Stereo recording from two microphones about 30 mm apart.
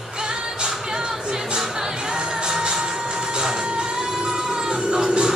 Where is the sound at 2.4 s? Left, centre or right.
Right.